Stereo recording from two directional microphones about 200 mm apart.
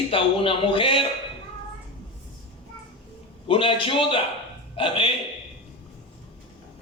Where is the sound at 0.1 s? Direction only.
25° left (ahead or behind).